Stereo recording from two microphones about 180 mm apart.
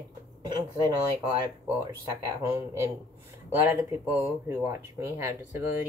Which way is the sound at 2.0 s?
15° right (ahead or behind).